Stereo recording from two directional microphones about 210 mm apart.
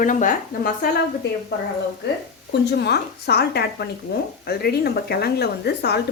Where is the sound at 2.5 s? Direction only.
55° left (ahead or behind).